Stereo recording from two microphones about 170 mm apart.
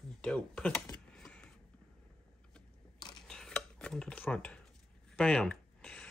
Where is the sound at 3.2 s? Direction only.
5° left (ahead or behind).